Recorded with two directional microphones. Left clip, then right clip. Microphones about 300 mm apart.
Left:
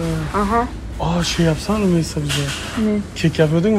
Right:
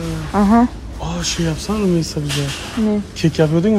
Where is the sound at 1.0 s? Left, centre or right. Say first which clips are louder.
Left 3 dB; centre.